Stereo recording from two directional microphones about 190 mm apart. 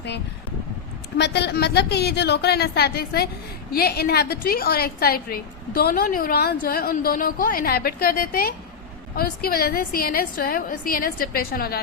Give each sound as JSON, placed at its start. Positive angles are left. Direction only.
{"t": 1.2, "sound": "a woman's voice", "side_deg": 60}